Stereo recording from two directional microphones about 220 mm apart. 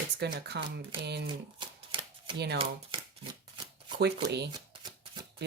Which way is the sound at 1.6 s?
20° right (ahead or behind).